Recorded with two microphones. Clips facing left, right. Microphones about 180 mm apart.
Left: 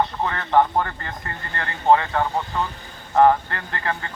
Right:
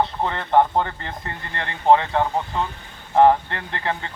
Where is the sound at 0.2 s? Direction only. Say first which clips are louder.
Right 1 dB; 20° right (ahead or behind).